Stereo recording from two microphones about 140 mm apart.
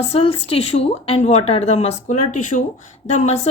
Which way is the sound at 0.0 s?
45° left (ahead or behind).